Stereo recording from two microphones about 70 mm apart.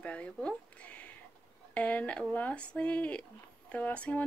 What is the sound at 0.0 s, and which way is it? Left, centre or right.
Speech, centre.